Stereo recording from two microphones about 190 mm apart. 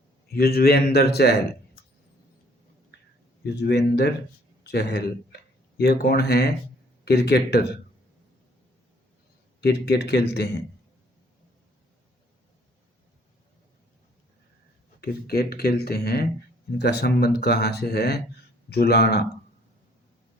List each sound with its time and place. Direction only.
0.3 s speech: 55° left (ahead or behind)
3.4 s speech: 60° left (ahead or behind)
9.6 s speech: 60° left (ahead or behind)
15.0 s speech: 55° left (ahead or behind)